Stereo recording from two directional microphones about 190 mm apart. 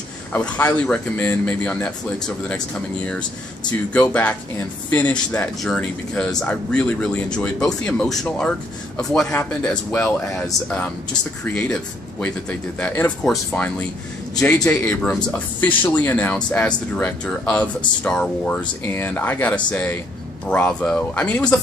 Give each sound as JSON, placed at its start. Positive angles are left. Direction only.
{"t": 0.3, "sound": "a man's voice", "side_deg": 10}